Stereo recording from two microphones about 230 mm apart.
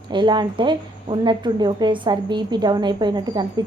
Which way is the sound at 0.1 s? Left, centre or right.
Centre.